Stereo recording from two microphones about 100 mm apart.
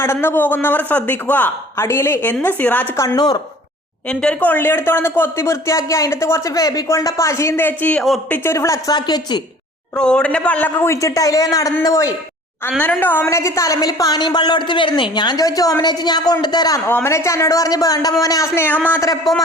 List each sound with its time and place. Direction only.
0.0 s speech: 25° left (ahead or behind)
2.9 s speech: 25° left (ahead or behind)
3.2 s a woman's voice: 45° left (ahead or behind)
4.1 s speech: 10° left (ahead or behind)
8.5 s speech: 30° left (ahead or behind)
9.0 s a woman's voice: 45° left (ahead or behind)
9.9 s a man's voice: 10° left (ahead or behind)
10.8 s speech: 30° left (ahead or behind)
12.8 s speech: 20° left (ahead or behind)
13.2 s a woman's voice: 30° left (ahead or behind)
16.8 s speech: 25° left (ahead or behind)
18.9 s speech: 35° left (ahead or behind)